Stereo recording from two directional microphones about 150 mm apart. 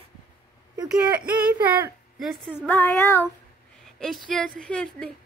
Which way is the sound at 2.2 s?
Centre (ahead or behind).